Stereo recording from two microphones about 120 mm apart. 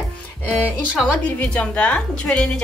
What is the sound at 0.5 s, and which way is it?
Speech, 5° right (ahead or behind).